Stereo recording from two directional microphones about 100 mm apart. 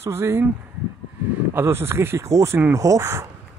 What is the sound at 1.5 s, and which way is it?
Speech, 25° right (ahead or behind).